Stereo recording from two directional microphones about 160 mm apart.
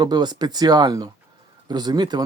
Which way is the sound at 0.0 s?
25° right (ahead or behind).